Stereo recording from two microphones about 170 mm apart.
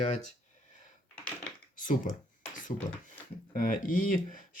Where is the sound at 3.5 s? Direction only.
55° left (ahead or behind).